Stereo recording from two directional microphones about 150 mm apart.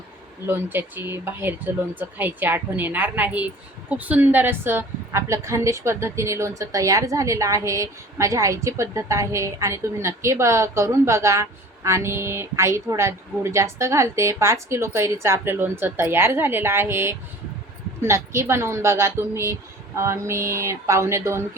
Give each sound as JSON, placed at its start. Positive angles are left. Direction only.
{"t": 0.4, "sound": "speech", "side_deg": -15}